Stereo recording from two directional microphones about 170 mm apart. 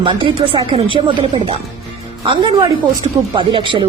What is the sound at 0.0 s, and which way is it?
A woman's voice, 30° right (ahead or behind).